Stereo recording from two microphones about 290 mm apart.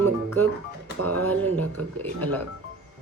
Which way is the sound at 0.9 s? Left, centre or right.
Right.